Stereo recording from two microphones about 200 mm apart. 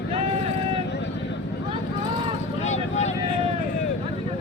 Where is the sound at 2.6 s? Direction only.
35° left (ahead or behind).